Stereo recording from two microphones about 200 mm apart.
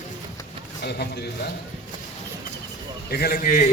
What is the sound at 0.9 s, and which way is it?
Speech, 55° left (ahead or behind).